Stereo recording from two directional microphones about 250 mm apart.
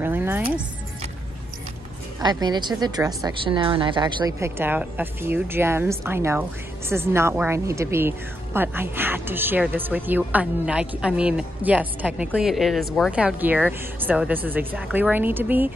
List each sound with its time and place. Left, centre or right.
0.0 s speech: centre
2.2 s a woman's voice: centre